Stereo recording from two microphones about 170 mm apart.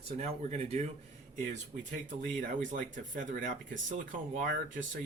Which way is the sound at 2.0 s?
50° right (ahead or behind).